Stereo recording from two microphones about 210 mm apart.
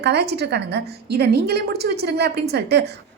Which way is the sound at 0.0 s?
50° right (ahead or behind).